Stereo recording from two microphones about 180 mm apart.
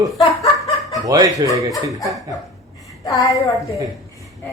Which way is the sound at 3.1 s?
20° left (ahead or behind).